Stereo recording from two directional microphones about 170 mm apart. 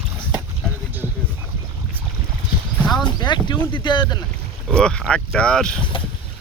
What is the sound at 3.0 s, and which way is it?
Speech, 25° left (ahead or behind).